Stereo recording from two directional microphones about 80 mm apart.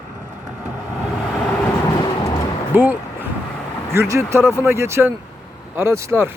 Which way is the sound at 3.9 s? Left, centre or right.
Right.